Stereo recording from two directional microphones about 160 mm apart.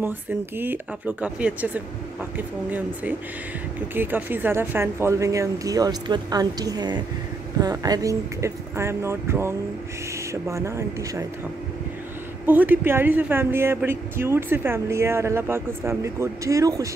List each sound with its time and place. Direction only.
0.6 s speech: 10° right (ahead or behind)
12.4 s speech: 10° right (ahead or behind)